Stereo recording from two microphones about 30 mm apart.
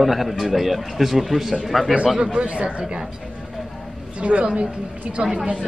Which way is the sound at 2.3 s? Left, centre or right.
Right.